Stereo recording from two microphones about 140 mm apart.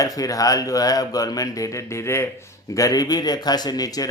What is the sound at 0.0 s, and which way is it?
A man's voice, 25° left (ahead or behind).